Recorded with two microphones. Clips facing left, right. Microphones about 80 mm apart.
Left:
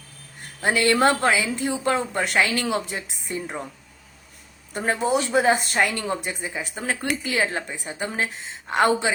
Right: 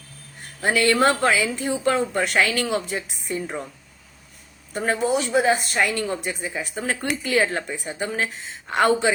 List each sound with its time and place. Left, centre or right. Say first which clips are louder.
0.6 s speech: even; left
4.9 s speech: even; left